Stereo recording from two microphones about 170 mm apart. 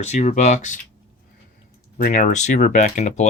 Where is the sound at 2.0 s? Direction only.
50° left (ahead or behind).